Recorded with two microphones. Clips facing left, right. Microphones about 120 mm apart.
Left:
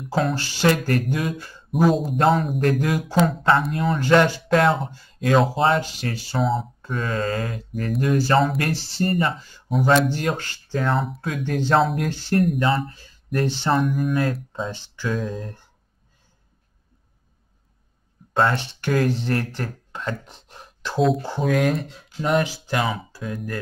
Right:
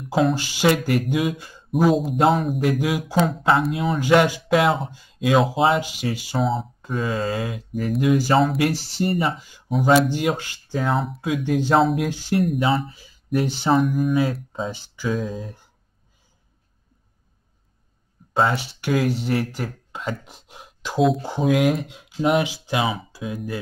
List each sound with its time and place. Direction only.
0.3 s speech: 15° right (ahead or behind)
1.7 s speech: centre (ahead or behind)
4.0 s speech: 10° right (ahead or behind)
10.8 s speech: centre (ahead or behind)
11.4 s speech: 10° right (ahead or behind)
11.8 s speech: centre (ahead or behind)
12.1 s speech: 10° right (ahead or behind)
14.7 s speech: 10° right (ahead or behind)
15.0 s speech: centre (ahead or behind)
18.3 s speech: 5° right (ahead or behind)